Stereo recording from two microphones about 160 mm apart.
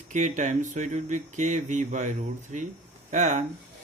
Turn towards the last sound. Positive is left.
turn(degrees=-45)  # may be behind; listen again after turning